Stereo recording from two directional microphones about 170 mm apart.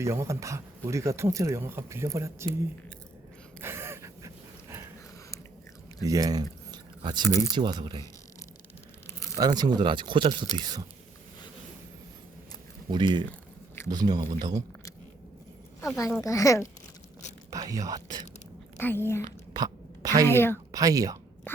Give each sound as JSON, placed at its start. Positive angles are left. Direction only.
{"t": 0.0, "sound": "speech", "side_deg": -15}
{"t": 3.6, "sound": "gasp", "side_deg": -15}
{"t": 6.1, "sound": "speech", "side_deg": -20}
{"t": 7.3, "sound": "speech", "side_deg": 20}
{"t": 7.5, "sound": "speech", "side_deg": -25}
{"t": 9.3, "sound": "speech", "side_deg": -25}
{"t": 12.9, "sound": "speech", "side_deg": -25}
{"t": 15.8, "sound": "speech", "side_deg": 20}
{"t": 17.7, "sound": "speech", "side_deg": -20}
{"t": 18.8, "sound": "speech", "side_deg": 15}
{"t": 19.2, "sound": "a sound", "side_deg": -25}
{"t": 20.2, "sound": "speech", "side_deg": 15}
{"t": 20.7, "sound": "speech", "side_deg": -20}
{"t": 21.5, "sound": "a sound", "side_deg": 15}